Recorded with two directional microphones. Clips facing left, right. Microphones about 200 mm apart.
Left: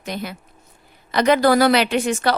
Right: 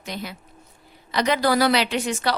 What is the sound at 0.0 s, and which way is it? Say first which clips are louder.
Speech: left 4 dB; 55° left (ahead or behind).